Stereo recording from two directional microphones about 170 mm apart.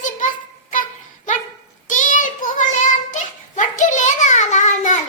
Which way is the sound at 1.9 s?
50° left (ahead or behind).